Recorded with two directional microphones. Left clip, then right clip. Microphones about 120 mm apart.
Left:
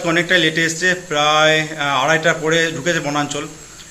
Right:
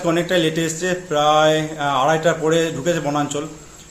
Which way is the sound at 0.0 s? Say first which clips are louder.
Left 3 dB; 15° right (ahead or behind).